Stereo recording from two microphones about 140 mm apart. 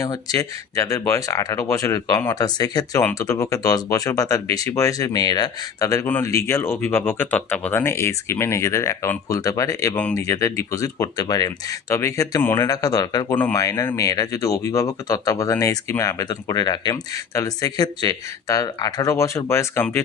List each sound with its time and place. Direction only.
0.0 s speech: 25° left (ahead or behind)
13.3 s speech: 15° left (ahead or behind)
13.6 s speech: 25° left (ahead or behind)